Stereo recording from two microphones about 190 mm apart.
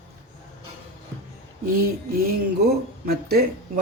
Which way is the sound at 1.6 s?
50° right (ahead or behind).